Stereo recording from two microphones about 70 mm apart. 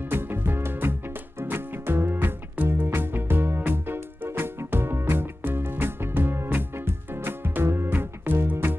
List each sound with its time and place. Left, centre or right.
0.1 s music: right